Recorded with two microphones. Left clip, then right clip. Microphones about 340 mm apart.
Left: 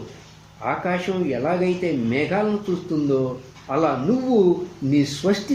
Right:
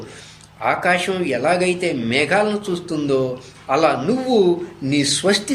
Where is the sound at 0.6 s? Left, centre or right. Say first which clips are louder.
Right 6 dB; right.